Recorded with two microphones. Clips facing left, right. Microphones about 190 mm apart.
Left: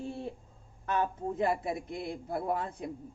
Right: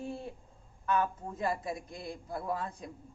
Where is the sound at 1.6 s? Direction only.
60° left (ahead or behind).